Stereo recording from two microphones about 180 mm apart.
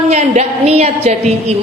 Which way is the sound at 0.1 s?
35° right (ahead or behind).